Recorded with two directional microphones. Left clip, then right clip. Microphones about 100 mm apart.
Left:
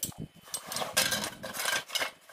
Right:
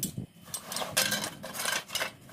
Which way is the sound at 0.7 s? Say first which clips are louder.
Even; 10° right (ahead or behind).